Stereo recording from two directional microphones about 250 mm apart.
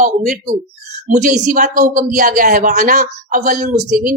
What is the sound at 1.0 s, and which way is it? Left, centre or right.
A woman's voice, right.